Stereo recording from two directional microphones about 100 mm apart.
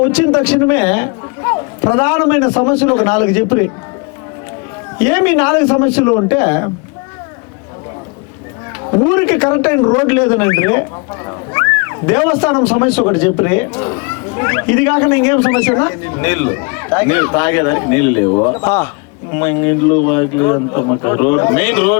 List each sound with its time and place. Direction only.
0.0 s speech: 20° left (ahead or behind)
4.9 s speech: 20° left (ahead or behind)
8.8 s speech: 30° left (ahead or behind)